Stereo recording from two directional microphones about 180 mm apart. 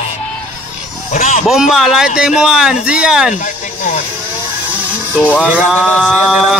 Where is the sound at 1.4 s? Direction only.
Centre (ahead or behind).